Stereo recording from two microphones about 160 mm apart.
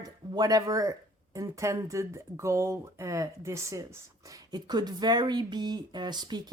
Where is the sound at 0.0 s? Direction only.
25° right (ahead or behind).